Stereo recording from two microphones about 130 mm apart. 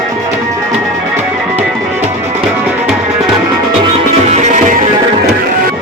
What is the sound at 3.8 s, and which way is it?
Music, 50° right (ahead or behind).